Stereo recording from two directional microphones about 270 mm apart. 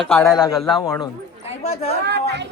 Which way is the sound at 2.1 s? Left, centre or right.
Right.